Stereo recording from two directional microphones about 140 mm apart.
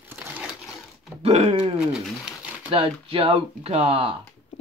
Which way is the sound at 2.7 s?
40° right (ahead or behind).